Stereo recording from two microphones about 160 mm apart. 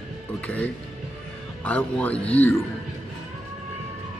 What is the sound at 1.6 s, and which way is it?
Speech, 10° left (ahead or behind).